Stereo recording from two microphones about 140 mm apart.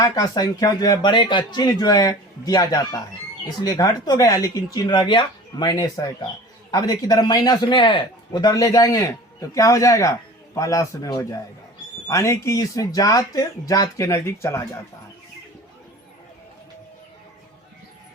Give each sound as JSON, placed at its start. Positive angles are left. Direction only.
{"t": 0.0, "sound": "speech", "side_deg": 25}